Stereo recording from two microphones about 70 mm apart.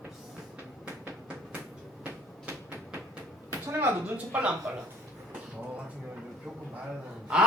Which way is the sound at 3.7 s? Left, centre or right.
Right.